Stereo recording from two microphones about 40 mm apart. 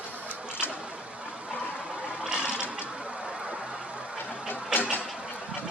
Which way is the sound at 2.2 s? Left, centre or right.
Right.